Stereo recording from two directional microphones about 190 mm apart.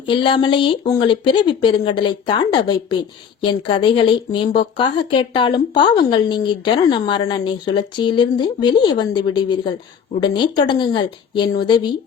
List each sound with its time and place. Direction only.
0.0 s a woman's voice: 25° left (ahead or behind)